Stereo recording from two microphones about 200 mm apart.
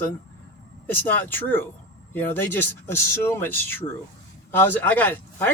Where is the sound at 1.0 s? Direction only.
10° left (ahead or behind).